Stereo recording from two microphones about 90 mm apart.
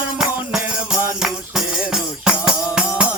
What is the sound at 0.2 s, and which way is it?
Music, 5° right (ahead or behind).